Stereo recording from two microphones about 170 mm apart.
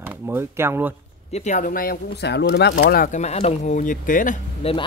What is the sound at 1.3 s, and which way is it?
Speech, 45° left (ahead or behind).